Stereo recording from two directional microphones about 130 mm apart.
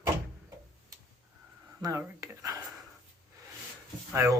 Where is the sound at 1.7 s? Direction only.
25° right (ahead or behind).